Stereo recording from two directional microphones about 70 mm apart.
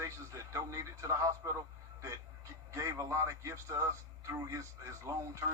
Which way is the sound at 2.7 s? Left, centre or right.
Right.